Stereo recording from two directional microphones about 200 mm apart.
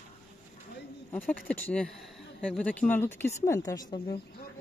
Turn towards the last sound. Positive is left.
turn(degrees=20)  # may be behind; listen again after turning